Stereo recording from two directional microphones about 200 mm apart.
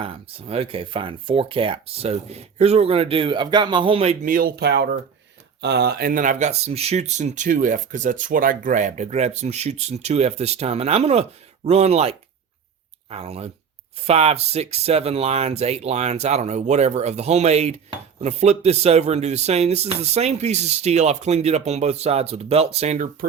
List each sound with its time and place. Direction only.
0.0 s speech: 30° right (ahead or behind)